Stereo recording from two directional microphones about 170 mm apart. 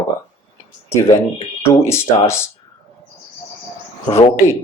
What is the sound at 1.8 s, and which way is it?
Speech, 15° left (ahead or behind).